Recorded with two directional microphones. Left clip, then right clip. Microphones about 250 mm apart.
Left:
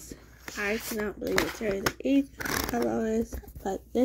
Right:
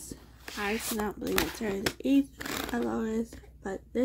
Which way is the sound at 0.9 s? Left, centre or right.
Right.